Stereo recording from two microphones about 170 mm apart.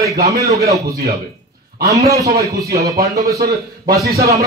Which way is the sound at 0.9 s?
65° right (ahead or behind).